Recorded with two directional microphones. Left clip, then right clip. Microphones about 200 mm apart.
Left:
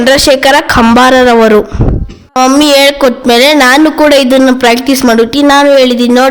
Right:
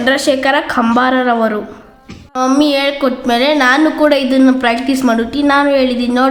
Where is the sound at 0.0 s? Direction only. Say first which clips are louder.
Left 7 dB; 40° left (ahead or behind).